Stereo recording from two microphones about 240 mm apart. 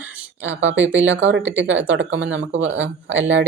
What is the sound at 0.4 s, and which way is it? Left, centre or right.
Speech, right.